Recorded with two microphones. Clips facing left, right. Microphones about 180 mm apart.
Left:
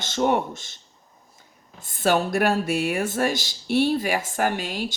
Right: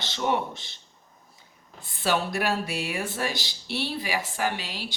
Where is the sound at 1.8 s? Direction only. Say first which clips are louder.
Left 5 dB; 50° left (ahead or behind).